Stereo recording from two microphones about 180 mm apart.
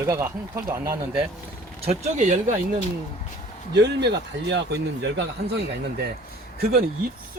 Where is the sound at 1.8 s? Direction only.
40° right (ahead or behind).